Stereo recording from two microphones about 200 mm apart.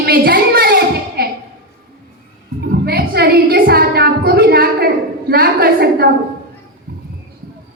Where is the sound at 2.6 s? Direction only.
50° right (ahead or behind).